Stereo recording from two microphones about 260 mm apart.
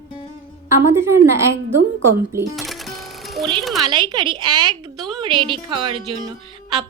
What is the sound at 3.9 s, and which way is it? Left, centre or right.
A woman's voice, centre.